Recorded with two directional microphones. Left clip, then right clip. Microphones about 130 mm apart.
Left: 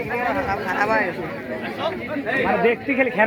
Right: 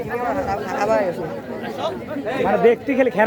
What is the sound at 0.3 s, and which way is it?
Speech, 20° right (ahead or behind).